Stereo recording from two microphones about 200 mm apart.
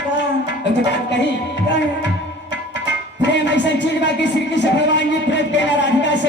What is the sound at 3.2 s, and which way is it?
A man's voice, 60° left (ahead or behind).